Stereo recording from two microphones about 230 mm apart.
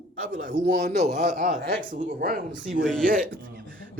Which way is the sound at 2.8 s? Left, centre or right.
Centre.